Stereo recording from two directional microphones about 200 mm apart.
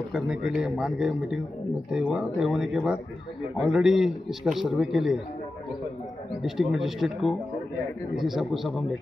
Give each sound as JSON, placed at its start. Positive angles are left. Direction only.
{"t": 0.5, "sound": "a man's voice", "side_deg": -5}
{"t": 6.4, "sound": "a man's voice", "side_deg": 0}